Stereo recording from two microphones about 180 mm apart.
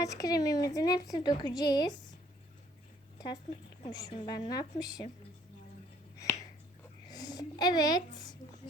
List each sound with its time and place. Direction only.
0.0 s a woman's voice: 20° left (ahead or behind)
3.9 s a woman's voice: 25° left (ahead or behind)
6.1 s finger snapping: 20° left (ahead or behind)
7.1 s speech: 20° left (ahead or behind)